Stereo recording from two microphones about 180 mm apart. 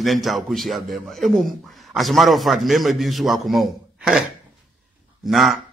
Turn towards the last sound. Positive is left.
turn(degrees=0)  # may be behind; listen again after turning